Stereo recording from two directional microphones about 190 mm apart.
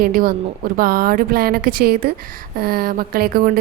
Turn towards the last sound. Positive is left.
turn(degrees=-50)  # may be behind; listen again after turning